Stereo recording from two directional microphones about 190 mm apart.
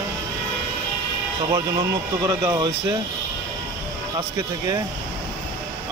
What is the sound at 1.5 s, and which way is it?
Speech, 15° right (ahead or behind).